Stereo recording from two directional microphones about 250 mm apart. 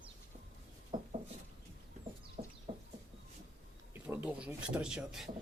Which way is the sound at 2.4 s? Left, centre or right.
Right.